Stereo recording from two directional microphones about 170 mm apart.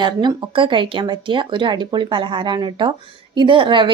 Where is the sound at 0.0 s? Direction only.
25° right (ahead or behind).